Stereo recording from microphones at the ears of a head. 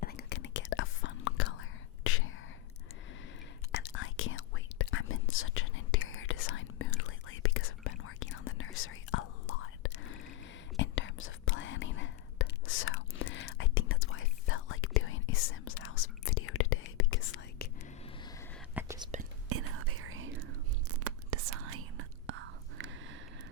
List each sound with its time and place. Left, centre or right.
0.0 s whispering: left
3.7 s whispering: left
19.5 s whispering: right